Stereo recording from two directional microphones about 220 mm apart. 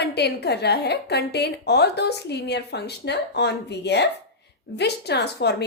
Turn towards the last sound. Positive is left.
turn(degrees=50)  # may be behind; listen again after turning